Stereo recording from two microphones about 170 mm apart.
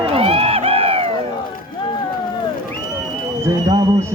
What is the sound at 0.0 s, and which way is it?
Music, 35° right (ahead or behind).